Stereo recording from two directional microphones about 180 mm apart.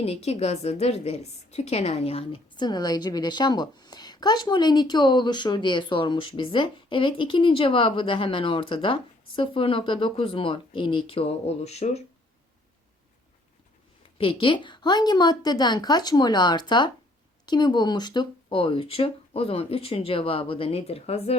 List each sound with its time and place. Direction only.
0.0 s a woman's voice: 35° left (ahead or behind)
14.2 s a woman's voice: 30° left (ahead or behind)